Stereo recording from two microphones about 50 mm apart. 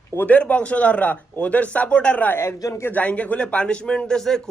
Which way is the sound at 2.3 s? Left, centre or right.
Left.